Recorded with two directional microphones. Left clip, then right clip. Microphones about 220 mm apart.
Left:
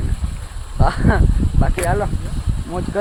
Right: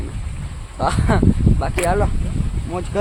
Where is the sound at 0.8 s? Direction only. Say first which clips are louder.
Even; 5° right (ahead or behind).